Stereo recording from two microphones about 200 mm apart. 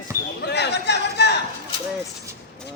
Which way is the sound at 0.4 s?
55° left (ahead or behind).